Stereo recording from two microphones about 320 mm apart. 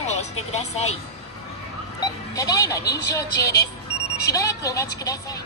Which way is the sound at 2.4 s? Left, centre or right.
Centre.